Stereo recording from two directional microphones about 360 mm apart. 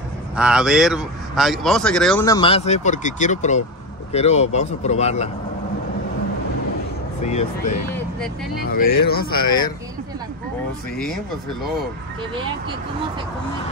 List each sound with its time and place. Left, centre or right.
0.4 s speech: centre
7.2 s speech: centre
9.4 s speech: centre